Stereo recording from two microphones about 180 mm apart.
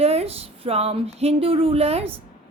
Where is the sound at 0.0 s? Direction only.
35° right (ahead or behind).